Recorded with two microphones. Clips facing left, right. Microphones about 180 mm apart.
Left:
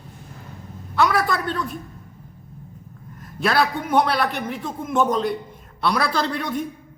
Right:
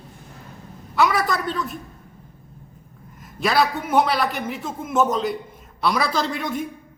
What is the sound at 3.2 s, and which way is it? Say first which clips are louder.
A man's voice: even; centre (ahead or behind).